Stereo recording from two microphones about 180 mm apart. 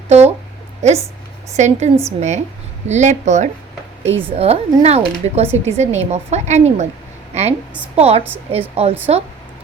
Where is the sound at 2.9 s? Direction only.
40° right (ahead or behind).